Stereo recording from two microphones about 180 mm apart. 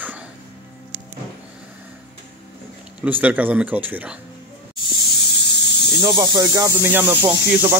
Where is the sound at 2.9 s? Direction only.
10° right (ahead or behind).